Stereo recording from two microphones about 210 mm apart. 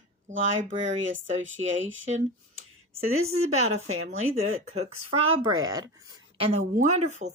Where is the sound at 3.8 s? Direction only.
85° right.